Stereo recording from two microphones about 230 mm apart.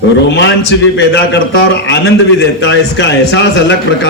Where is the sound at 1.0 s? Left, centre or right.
Left.